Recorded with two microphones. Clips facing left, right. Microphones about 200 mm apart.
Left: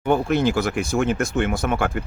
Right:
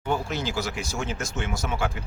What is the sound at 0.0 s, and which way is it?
Speech, 60° left (ahead or behind).